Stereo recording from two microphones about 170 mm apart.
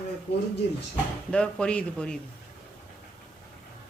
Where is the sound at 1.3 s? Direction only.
5° left (ahead or behind).